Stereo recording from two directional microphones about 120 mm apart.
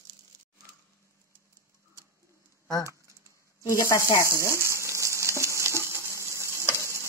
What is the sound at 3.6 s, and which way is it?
Speech, 25° left (ahead or behind).